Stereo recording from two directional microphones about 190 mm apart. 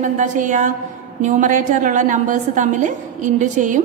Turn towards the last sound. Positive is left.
turn(degrees=-40)  # may be behind; listen again after turning